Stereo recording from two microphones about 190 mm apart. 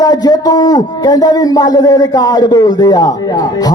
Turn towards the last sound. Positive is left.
turn(degrees=20)  # may be behind; listen again after turning